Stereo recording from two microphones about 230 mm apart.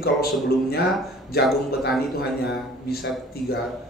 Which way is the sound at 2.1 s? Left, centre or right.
Left.